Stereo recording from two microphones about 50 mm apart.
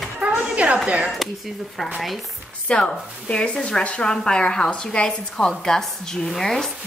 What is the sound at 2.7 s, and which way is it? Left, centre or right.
A woman's voice, left.